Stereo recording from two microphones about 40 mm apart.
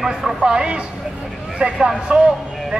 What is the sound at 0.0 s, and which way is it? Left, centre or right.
Speech, centre.